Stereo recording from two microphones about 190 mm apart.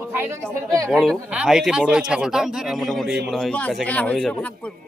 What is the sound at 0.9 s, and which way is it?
A man's voice, centre (ahead or behind).